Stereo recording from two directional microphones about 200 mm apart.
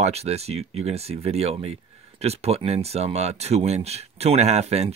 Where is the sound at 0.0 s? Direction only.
30° right (ahead or behind).